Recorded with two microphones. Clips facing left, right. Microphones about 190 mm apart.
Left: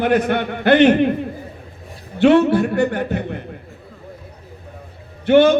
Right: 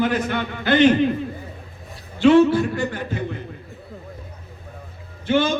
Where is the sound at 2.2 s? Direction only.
65° left (ahead or behind).